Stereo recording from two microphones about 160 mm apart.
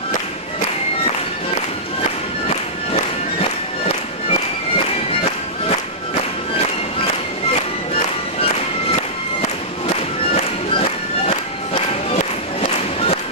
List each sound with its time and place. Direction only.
2.0 s music: 40° left (ahead or behind)
7.9 s music: 35° left (ahead or behind)